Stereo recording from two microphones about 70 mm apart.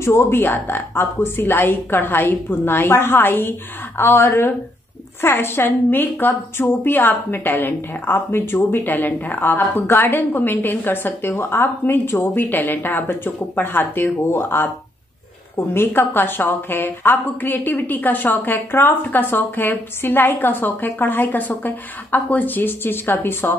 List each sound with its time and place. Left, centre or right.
0.0 s a woman's voice: left